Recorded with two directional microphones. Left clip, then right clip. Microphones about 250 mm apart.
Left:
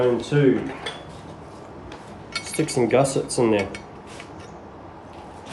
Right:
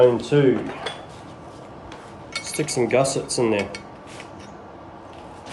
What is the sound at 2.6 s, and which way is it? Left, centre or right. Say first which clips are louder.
Cutlery: left 1 dB; centre.